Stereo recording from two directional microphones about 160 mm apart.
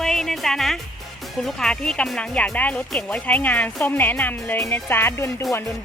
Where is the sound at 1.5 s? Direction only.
5° left (ahead or behind).